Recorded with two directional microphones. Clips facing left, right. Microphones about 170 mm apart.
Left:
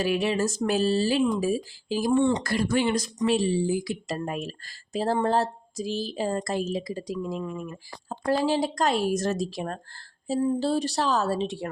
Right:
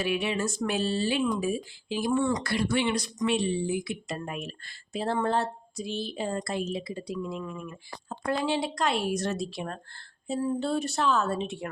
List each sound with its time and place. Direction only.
0.0 s speech: 40° left (ahead or behind)